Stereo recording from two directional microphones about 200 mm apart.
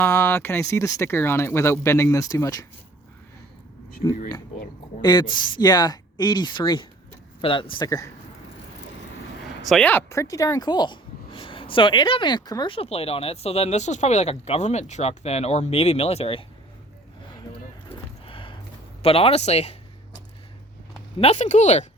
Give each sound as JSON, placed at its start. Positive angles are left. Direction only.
{"t": 0.0, "sound": "speech", "side_deg": 15}
{"t": 4.9, "sound": "speech", "side_deg": 20}
{"t": 9.6, "sound": "speech", "side_deg": 5}
{"t": 18.3, "sound": "a sound", "side_deg": 25}
{"t": 19.0, "sound": "speech", "side_deg": 30}
{"t": 21.2, "sound": "speech", "side_deg": 35}